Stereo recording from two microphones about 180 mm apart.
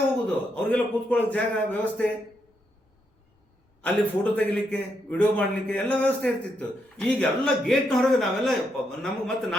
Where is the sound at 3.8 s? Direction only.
5° left (ahead or behind).